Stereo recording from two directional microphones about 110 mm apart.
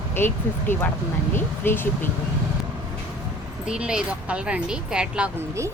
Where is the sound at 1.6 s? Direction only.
20° left (ahead or behind).